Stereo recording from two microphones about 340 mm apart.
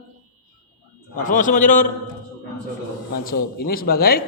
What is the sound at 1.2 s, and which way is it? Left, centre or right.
Speech, left.